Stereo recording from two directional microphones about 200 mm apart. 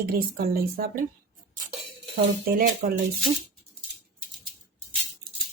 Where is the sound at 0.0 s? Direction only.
50° right (ahead or behind).